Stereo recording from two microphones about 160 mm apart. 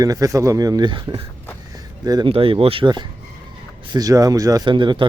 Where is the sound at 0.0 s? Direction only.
20° right (ahead or behind).